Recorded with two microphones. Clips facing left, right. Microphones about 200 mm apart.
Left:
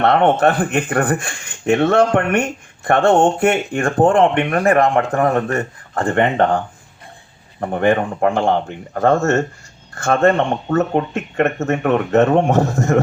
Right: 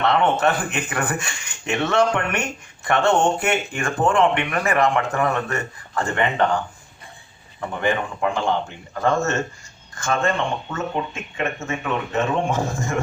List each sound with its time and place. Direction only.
0.0 s speech: 55° left (ahead or behind)
7.6 s speech: 55° left (ahead or behind)